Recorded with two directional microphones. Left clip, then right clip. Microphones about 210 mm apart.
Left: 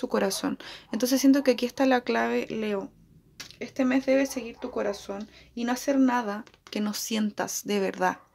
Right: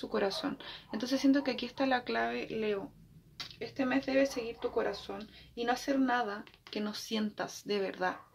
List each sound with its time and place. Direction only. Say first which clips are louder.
0.0 s speech: left 6 dB; 50° left (ahead or behind)